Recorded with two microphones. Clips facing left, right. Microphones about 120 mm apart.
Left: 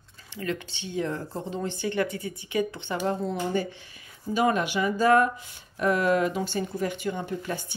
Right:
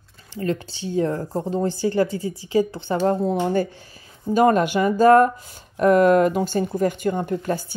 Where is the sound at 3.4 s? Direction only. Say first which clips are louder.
Right 6 dB; 45° right (ahead or behind).